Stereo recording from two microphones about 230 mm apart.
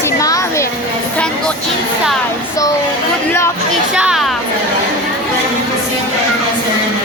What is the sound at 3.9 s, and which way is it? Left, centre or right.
Speech, centre.